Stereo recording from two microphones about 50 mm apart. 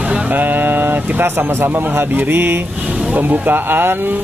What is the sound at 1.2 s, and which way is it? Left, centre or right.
Speech, right.